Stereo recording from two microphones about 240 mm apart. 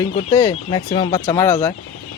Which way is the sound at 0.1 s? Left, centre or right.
Left.